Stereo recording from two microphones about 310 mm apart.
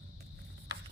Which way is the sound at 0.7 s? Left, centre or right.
Right.